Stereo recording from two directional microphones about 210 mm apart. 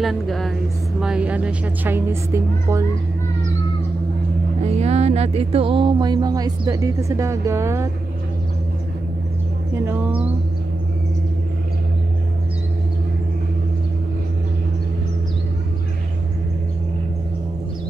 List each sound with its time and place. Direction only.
0.0 s a woman's voice: centre (ahead or behind)
4.6 s music: 30° right (ahead or behind); by 7.9 s 15° right (ahead or behind)
9.8 s a woman's voice: 10° right (ahead or behind)